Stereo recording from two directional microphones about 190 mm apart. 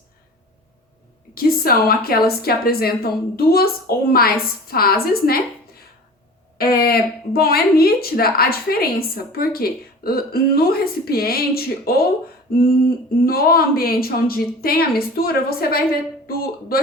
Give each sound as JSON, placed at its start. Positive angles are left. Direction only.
{"t": 1.4, "sound": "speech", "side_deg": 50}
{"t": 6.6, "sound": "speech", "side_deg": 55}
{"t": 13.2, "sound": "speech", "side_deg": 50}